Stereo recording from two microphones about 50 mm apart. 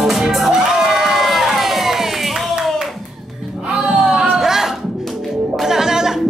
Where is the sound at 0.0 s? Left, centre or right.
Centre.